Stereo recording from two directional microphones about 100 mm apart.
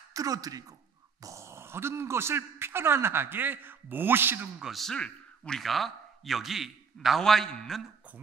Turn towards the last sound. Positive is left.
turn(degrees=5)  # may be behind; listen again after turning